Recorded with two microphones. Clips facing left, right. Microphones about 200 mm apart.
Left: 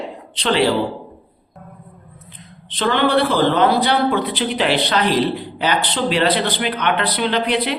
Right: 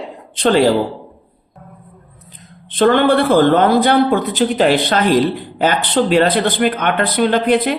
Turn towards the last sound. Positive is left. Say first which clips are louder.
# right 5 dB
turn(degrees=-50)  # may be behind; listen again after turning